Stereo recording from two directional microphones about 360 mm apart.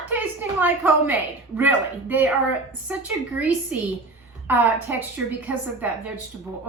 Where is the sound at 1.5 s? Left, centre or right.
Centre.